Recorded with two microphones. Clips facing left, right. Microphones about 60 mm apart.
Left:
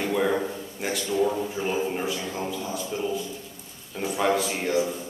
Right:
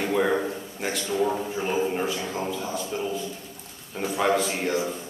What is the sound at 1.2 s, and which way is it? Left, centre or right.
A man's voice, centre.